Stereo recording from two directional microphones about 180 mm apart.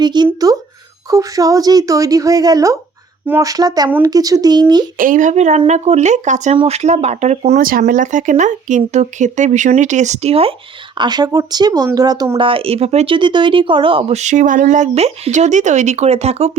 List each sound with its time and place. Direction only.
0.0 s speech: 25° right (ahead or behind)
3.8 s speech: 10° right (ahead or behind)
4.9 s speech: 45° right (ahead or behind)